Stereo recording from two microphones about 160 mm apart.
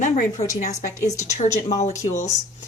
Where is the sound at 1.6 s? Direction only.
45° left (ahead or behind).